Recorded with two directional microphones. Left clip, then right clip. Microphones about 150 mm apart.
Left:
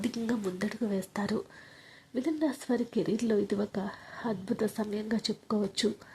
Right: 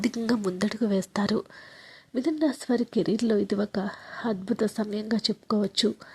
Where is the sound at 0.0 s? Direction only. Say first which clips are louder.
Right 6 dB; 35° right (ahead or behind).